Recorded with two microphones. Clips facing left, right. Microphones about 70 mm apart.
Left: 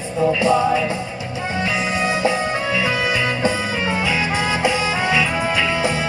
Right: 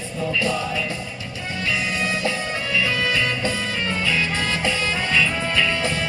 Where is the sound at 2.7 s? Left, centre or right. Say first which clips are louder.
Right 1 dB; centre.